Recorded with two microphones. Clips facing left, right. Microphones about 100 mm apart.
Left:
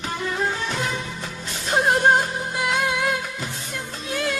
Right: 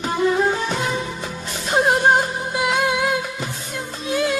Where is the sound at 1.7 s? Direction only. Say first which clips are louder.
Right 2 dB; 5° right (ahead or behind).